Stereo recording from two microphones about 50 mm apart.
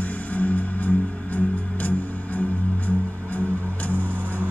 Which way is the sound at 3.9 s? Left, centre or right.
Right.